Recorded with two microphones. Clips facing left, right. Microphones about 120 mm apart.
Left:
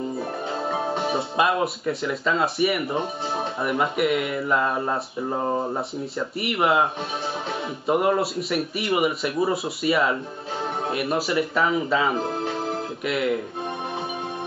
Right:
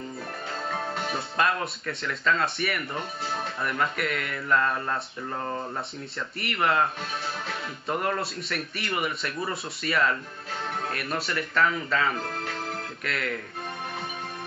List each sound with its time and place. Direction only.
0.2 s music: 25° left (ahead or behind)
1.3 s speech: 10° left (ahead or behind)
2.8 s speech: 20° left (ahead or behind)
3.6 s speech: 10° left (ahead or behind)
5.8 s speech: 5° left (ahead or behind); by 12.8 s 20° left (ahead or behind)
13.0 s speech: 10° left (ahead or behind)